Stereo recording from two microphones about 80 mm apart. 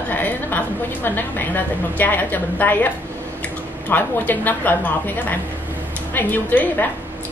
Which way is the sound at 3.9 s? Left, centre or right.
Left.